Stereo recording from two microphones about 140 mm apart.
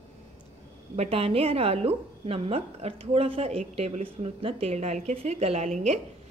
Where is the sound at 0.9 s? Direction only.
40° right (ahead or behind).